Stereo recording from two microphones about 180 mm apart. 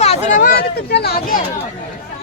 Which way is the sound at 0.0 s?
35° left (ahead or behind).